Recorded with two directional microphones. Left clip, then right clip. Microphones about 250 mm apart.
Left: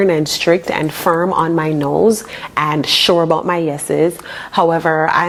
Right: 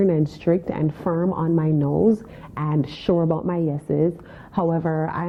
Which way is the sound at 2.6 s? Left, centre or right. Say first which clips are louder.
Left 14 dB; centre.